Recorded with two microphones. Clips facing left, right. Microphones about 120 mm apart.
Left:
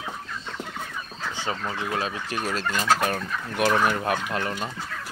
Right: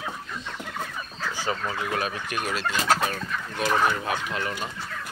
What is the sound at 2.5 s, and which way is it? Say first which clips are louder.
Fowl: left 1 dB; 50° left (ahead or behind).